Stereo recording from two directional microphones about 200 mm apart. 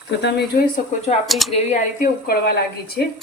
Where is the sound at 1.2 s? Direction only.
Centre (ahead or behind).